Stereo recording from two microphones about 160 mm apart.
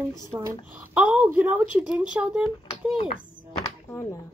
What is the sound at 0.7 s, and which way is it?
A woman's voice, 5° right (ahead or behind).